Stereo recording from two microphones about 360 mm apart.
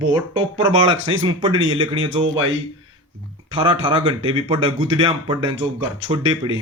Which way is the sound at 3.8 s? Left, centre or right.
Centre.